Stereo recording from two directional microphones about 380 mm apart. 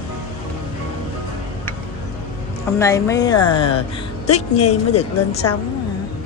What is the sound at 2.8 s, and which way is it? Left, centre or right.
Speech, centre.